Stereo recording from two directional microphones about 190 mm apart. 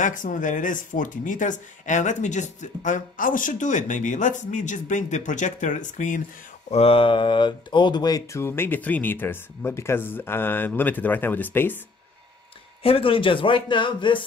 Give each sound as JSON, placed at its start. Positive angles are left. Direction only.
{"t": 0.0, "sound": "speech", "side_deg": 45}
{"t": 6.7, "sound": "speech", "side_deg": 30}
{"t": 12.8, "sound": "a man's voice", "side_deg": 30}